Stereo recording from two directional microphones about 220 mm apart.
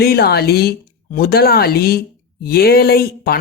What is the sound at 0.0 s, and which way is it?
Speech, 45° left (ahead or behind).